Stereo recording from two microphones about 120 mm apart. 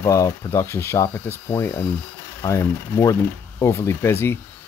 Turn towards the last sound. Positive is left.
turn(degrees=20)  # may be behind; listen again after turning